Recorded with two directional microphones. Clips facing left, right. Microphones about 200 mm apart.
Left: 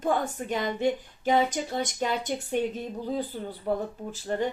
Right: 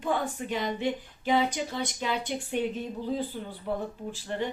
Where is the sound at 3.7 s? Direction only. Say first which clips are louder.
Left 4 dB; 40° left (ahead or behind).